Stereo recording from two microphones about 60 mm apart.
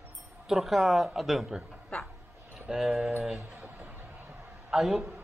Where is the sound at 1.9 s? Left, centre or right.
Centre.